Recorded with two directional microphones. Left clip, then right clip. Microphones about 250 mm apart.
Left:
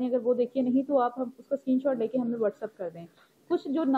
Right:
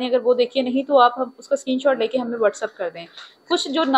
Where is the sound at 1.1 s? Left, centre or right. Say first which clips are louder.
Right 9 dB; centre.